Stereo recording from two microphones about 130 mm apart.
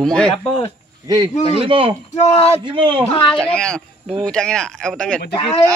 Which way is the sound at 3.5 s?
5° left (ahead or behind).